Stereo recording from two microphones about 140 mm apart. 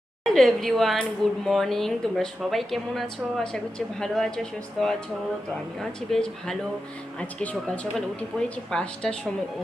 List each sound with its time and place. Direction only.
0.3 s speech: centre (ahead or behind)